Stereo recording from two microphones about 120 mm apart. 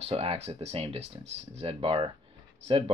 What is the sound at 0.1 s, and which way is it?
Speech, 55° right (ahead or behind).